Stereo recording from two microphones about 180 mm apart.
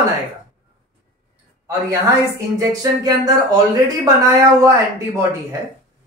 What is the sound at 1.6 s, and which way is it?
Speech, 15° right (ahead or behind).